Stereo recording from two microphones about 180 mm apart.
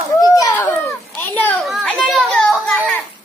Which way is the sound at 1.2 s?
10° left (ahead or behind).